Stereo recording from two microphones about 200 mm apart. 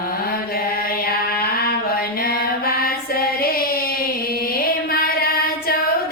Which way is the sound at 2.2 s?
50° left (ahead or behind).